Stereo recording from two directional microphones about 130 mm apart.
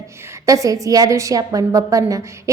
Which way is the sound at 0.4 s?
25° right (ahead or behind).